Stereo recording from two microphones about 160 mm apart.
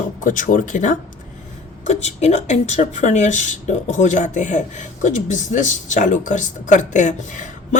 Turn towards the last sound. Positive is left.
turn(degrees=50)  # may be behind; listen again after turning